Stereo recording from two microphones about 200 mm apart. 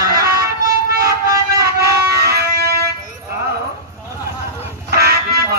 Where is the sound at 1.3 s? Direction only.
15° right (ahead or behind).